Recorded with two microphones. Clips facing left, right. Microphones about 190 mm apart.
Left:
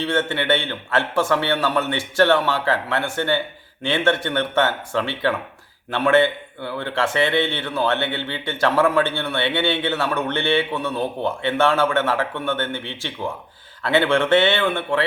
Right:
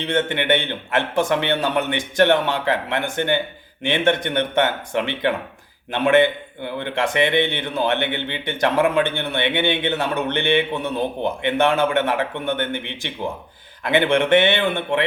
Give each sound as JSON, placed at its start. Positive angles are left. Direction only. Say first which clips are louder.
{"t": 0.0, "sound": "speech", "louder": "even", "side_deg": -20}